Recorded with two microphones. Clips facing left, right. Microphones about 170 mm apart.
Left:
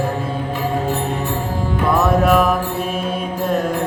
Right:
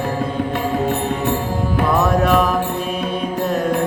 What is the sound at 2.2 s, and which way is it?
Mantra, 5° left (ahead or behind).